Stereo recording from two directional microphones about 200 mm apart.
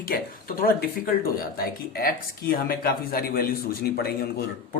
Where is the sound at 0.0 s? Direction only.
45° left (ahead or behind).